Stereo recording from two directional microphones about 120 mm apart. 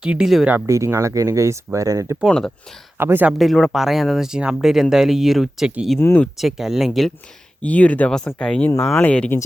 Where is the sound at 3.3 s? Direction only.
Centre (ahead or behind).